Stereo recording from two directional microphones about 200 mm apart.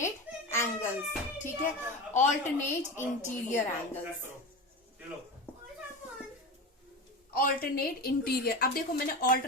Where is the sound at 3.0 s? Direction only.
35° left (ahead or behind).